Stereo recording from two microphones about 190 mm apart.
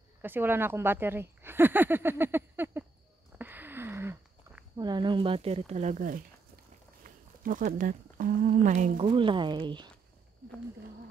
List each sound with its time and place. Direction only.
0.2 s speech: 10° right (ahead or behind)
3.3 s a sound: 10° right (ahead or behind)
4.7 s speech: 20° right (ahead or behind); by 6.2 s 45° right (ahead or behind)
7.4 s speech: 45° right (ahead or behind)
9.0 s speech: 25° right (ahead or behind)